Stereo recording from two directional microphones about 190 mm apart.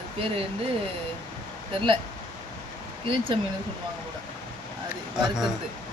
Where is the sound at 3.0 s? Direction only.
30° right (ahead or behind).